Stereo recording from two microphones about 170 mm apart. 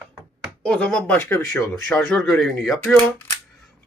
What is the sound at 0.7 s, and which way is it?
Speech, 5° left (ahead or behind).